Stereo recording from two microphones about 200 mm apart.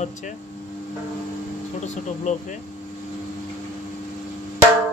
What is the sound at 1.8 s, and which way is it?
Speech, 35° left (ahead or behind).